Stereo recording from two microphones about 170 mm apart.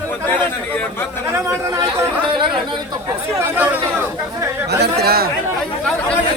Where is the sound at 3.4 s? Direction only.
10° right (ahead or behind).